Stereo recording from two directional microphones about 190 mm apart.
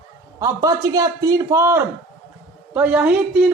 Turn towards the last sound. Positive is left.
turn(degrees=-5)  # may be behind; listen again after turning